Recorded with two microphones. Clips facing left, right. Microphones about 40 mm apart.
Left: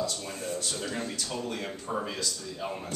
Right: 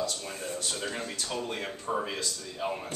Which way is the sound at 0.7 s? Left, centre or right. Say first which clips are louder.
Left 1 dB; centre.